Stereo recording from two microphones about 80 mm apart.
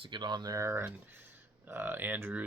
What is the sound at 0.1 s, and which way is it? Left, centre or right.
Speech, right.